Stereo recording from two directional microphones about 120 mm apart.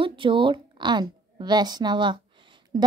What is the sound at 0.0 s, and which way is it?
A woman's voice, 45° right (ahead or behind).